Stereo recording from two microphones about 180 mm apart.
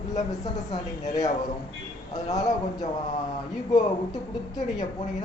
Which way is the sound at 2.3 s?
20° left (ahead or behind).